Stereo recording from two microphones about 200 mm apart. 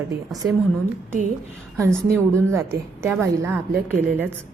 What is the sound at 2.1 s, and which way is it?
A woman's voice, 15° right (ahead or behind).